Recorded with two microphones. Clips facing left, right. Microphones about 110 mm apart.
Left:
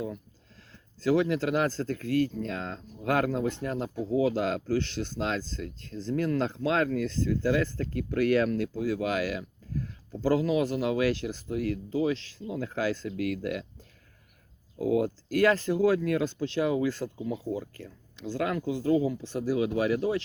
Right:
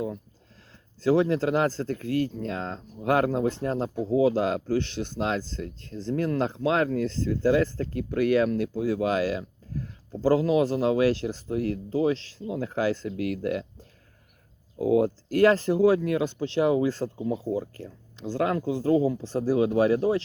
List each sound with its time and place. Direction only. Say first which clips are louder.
1.0 s speech: right 3 dB; 30° right (ahead or behind)
14.8 s speech: right 4 dB; 25° right (ahead or behind)